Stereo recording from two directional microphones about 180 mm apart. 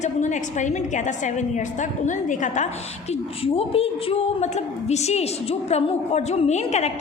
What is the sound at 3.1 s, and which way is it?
A woman's voice, 30° left (ahead or behind).